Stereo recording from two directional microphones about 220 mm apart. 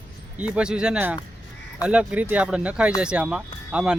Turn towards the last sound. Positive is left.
turn(degrees=-5)  # may be behind; listen again after turning